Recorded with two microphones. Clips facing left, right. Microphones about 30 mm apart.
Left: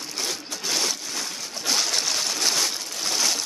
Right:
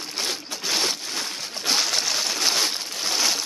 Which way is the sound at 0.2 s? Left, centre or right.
Right.